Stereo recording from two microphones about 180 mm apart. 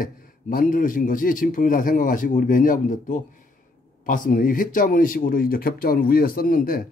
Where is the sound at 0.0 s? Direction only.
50° left (ahead or behind).